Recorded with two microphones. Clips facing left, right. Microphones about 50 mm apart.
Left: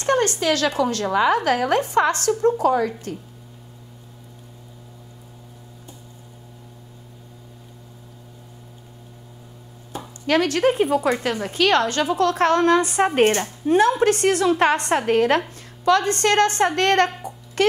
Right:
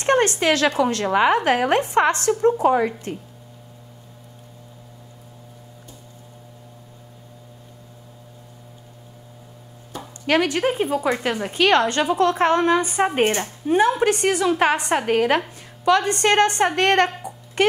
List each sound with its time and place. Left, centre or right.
0.0 s a woman's voice: right
10.2 s a woman's voice: centre
10.6 s speech: centre
11.1 s a woman's voice: centre